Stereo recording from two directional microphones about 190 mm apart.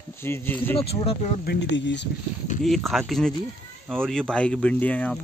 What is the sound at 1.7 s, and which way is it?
Speech, 65° left (ahead or behind).